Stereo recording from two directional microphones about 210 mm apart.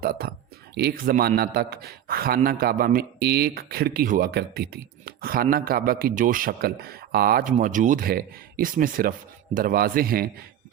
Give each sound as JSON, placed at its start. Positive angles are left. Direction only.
{"t": 0.0, "sound": "a man's voice", "side_deg": -45}